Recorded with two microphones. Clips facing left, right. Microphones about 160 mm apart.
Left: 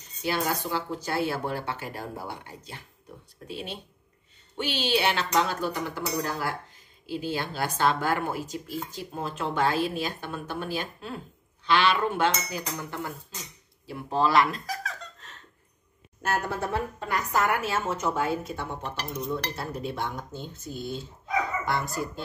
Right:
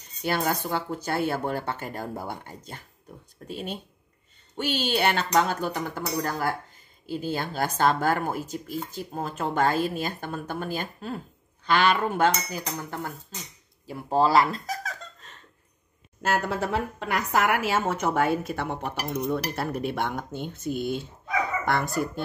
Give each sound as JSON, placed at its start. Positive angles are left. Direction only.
{"t": 0.2, "sound": "speech", "side_deg": -50}
{"t": 16.3, "sound": "a woman's voice", "side_deg": -90}